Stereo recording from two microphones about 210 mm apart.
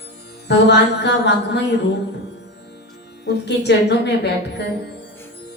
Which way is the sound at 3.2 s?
55° left (ahead or behind).